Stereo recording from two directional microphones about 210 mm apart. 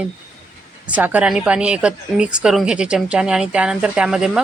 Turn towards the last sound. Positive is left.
turn(degrees=-5)  # may be behind; listen again after turning